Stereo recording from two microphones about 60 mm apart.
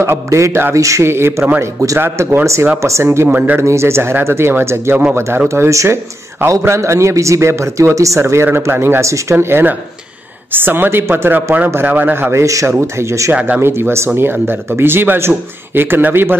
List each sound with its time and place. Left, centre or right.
0.0 s a man's voice: right
3.3 s speech: right
3.5 s speech: right
5.5 s a man's voice: right
8.2 s speech: right
9.0 s speech: right
12.3 s a man's voice: right
13.3 s speech: right
13.6 s speech: right